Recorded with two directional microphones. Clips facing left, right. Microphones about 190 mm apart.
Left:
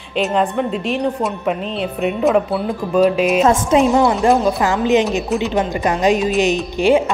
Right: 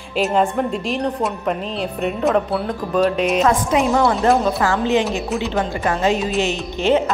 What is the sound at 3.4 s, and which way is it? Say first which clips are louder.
A woman's voice: left 3 dB; 25° left (ahead or behind).